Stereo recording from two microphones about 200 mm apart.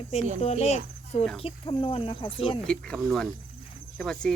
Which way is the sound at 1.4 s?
30° left (ahead or behind).